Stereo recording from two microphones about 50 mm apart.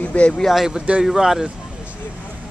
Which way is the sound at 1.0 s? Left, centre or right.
Centre.